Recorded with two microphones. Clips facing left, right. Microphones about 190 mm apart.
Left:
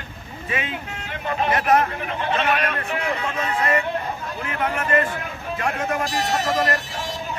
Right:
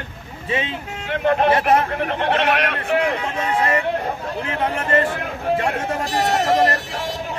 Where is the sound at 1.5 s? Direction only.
30° right (ahead or behind).